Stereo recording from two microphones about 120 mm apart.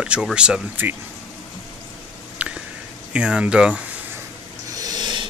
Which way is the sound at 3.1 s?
10° right (ahead or behind).